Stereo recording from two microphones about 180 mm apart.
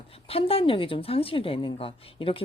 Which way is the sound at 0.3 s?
30° left (ahead or behind).